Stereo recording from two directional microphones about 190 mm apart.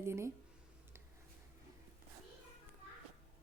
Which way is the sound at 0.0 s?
15° right (ahead or behind).